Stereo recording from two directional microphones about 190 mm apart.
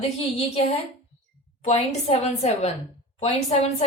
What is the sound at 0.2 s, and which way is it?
Speech, 30° left (ahead or behind).